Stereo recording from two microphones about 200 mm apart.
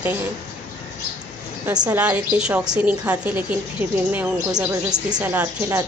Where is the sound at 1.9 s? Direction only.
10° right (ahead or behind).